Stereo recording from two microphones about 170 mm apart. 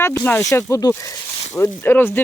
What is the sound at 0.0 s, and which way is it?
Speech, 15° left (ahead or behind).